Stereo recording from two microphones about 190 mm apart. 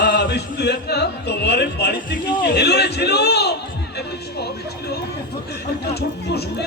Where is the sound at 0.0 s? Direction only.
50° left (ahead or behind).